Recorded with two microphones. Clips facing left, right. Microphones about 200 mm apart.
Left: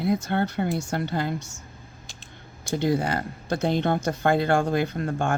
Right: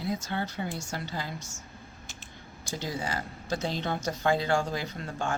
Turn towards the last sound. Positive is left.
turn(degrees=55)  # may be behind; listen again after turning